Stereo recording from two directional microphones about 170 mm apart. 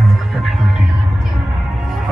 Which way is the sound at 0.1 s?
Centre (ahead or behind).